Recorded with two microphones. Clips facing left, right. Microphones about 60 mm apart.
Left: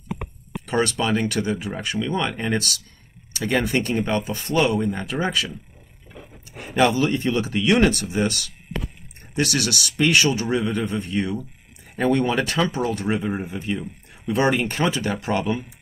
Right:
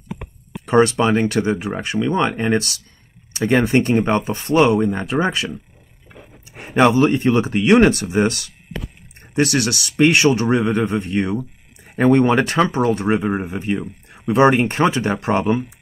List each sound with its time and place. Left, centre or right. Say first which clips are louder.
0.7 s speech: right 7 dB; right